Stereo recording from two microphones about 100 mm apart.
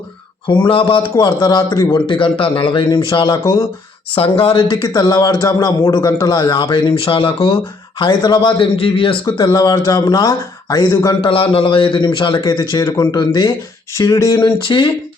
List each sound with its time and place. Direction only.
0.4 s speech: 50° left (ahead or behind)
1.1 s speech: 40° left (ahead or behind)
2.0 s speech: 60° left (ahead or behind)
3.4 s speech: 25° left (ahead or behind)
4.1 s speech: 70° left (ahead or behind)
4.7 s speech: 45° left (ahead or behind); by 8.0 s 60° left (ahead or behind)
8.0 s speech: 45° left (ahead or behind); by 9.1 s 60° left (ahead or behind)
9.2 s speech: 35° left (ahead or behind)
11.1 s speech: 60° left (ahead or behind)
12.4 s speech: 40° left (ahead or behind)
13.9 s speech: 30° left (ahead or behind); by 14.8 s 50° left (ahead or behind)